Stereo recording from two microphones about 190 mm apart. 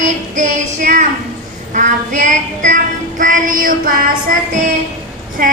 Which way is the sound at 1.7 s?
40° right (ahead or behind).